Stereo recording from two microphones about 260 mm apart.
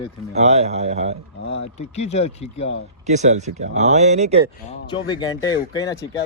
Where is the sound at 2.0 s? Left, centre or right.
Left.